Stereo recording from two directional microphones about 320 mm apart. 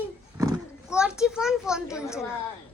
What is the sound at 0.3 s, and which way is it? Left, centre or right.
Roaring cats, centre.